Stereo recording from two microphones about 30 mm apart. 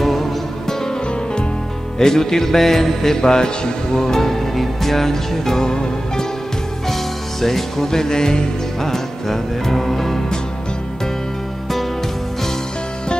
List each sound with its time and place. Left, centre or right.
0.0 s music: centre
2.0 s a man's voice: centre
5.7 s music: left
7.4 s a man's voice: centre
8.8 s music: centre